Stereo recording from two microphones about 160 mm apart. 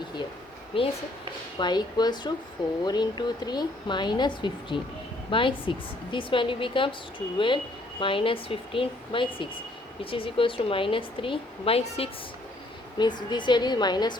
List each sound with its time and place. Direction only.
0.7 s a woman's voice: 35° left (ahead or behind)
13.0 s speech: 30° left (ahead or behind)